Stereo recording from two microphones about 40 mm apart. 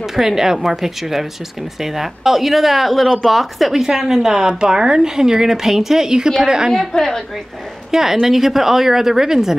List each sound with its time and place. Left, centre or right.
0.0 s speech: centre
3.8 s speech: centre
6.9 s a woman's voice: centre
7.9 s speech: centre